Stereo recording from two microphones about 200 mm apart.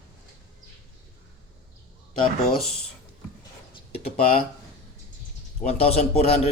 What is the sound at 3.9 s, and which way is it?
Speech, 30° left (ahead or behind).